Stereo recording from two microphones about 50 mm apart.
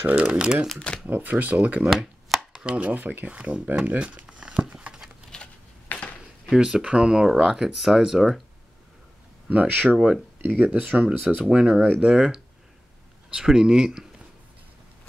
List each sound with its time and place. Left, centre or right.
0.0 s speech: right
0.3 s speech: centre
0.7 s speech: centre
1.1 s speech: right
1.9 s chopping: centre
2.6 s speech: right
4.0 s crumpling: right
5.3 s a sound: centre
5.9 s a sound: left
6.5 s speech: centre
9.5 s speech: right; by 14.0 s centre